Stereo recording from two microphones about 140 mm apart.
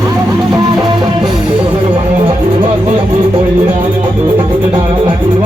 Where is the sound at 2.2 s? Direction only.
40° right (ahead or behind).